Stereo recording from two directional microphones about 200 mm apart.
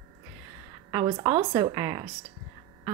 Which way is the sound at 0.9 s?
20° right (ahead or behind).